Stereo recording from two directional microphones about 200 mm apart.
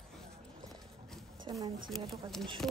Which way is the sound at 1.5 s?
25° right (ahead or behind).